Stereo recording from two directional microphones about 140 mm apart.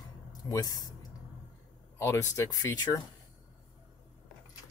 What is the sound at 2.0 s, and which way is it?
Speech, 20° left (ahead or behind).